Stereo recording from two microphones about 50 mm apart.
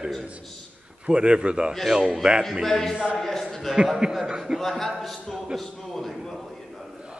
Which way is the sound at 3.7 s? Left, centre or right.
Centre.